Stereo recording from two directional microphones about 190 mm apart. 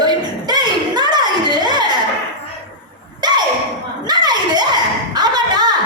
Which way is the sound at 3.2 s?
20° right (ahead or behind).